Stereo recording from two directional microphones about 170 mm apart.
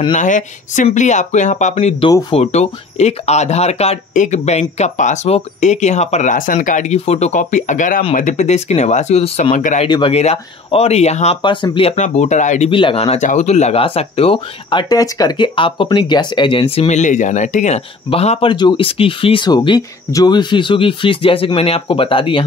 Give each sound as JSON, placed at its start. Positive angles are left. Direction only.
{"t": 0.1, "sound": "speech", "side_deg": 50}
{"t": 9.8, "sound": "speech", "side_deg": 25}
{"t": 10.1, "sound": "speech", "side_deg": 35}
{"t": 11.4, "sound": "speech", "side_deg": 30}